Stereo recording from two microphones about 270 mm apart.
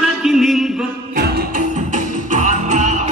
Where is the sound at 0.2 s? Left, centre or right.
Centre.